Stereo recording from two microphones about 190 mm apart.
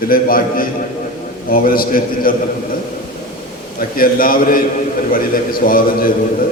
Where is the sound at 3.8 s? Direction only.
50° left (ahead or behind).